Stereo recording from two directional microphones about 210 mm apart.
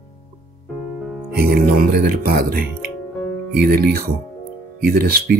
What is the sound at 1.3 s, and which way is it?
Speech, 45° right (ahead or behind).